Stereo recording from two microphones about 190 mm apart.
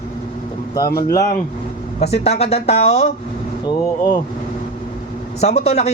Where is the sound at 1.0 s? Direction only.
15° left (ahead or behind).